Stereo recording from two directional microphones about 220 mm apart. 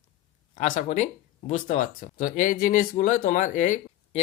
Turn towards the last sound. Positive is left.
turn(degrees=35)  # may be behind; listen again after turning